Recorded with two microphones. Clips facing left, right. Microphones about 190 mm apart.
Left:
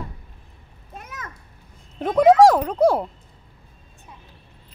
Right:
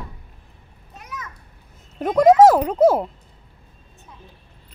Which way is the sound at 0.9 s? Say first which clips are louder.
Right 1 dB; 50° left (ahead or behind).